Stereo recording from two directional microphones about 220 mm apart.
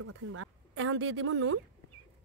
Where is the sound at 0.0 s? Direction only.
70° right (ahead or behind).